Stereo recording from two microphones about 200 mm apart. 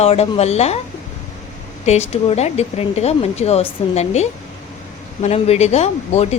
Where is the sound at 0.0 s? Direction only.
30° left (ahead or behind).